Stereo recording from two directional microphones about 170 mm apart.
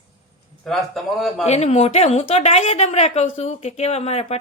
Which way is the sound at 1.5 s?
40° left (ahead or behind).